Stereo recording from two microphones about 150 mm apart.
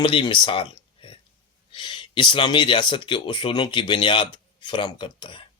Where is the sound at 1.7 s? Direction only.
30° left (ahead or behind).